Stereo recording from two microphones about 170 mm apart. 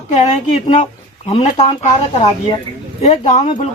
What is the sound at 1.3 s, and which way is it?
Speech, 40° left (ahead or behind).